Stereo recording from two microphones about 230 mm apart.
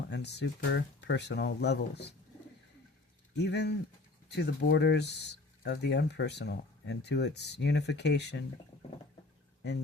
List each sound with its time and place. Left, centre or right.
0.1 s speech: left
3.3 s speech: left